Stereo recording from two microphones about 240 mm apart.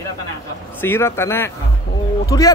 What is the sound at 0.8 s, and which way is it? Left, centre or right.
Speech, centre.